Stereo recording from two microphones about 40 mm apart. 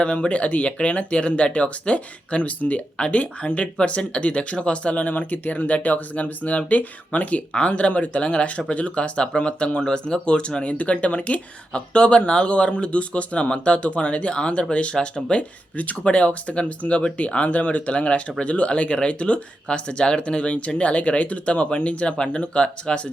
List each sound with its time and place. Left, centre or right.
0.0 s speech: left
15.7 s speech: left